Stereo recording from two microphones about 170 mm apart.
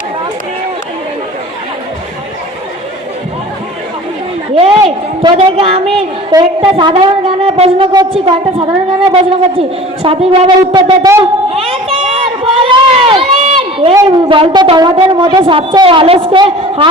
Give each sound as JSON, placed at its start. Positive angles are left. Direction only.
{"t": 4.5, "sound": "a woman's voice", "side_deg": -30}
{"t": 6.3, "sound": "shofar", "side_deg": -30}
{"t": 11.5, "sound": "run", "side_deg": -35}
{"t": 14.1, "sound": "a sound", "side_deg": -30}
{"t": 15.3, "sound": "shofar", "side_deg": -30}